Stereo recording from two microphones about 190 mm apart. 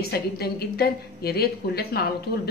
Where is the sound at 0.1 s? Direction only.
55° left (ahead or behind).